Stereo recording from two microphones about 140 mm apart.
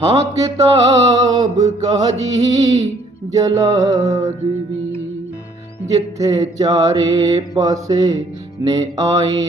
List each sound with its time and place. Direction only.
0.2 s mantra: 25° right (ahead or behind)
5.9 s mantra: 25° right (ahead or behind)